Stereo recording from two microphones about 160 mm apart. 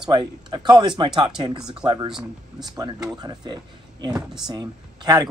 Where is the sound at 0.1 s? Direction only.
30° right (ahead or behind).